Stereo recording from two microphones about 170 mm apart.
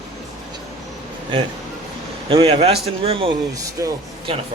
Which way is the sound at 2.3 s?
30° right (ahead or behind).